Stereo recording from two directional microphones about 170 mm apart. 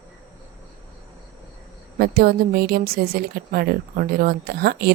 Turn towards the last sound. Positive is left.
turn(degrees=-70)  # may be behind; listen again after turning